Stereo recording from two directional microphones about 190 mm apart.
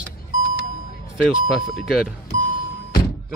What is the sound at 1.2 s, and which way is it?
Speech, centre (ahead or behind).